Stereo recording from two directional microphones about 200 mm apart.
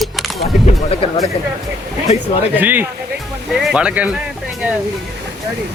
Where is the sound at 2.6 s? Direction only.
10° right (ahead or behind).